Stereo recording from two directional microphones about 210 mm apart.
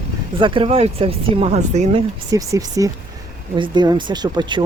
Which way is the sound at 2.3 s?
15° right (ahead or behind).